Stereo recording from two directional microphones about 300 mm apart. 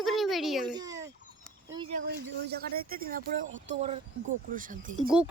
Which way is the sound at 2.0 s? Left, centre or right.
Right.